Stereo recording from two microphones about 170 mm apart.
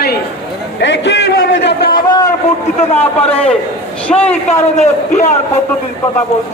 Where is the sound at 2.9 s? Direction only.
35° left (ahead or behind).